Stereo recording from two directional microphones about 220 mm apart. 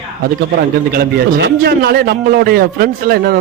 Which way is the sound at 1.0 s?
40° right (ahead or behind).